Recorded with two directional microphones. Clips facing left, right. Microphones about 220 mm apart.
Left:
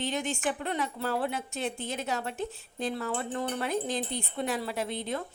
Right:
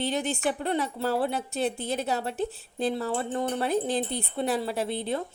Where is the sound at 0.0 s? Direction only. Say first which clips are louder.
Right 3 dB; 35° right (ahead or behind).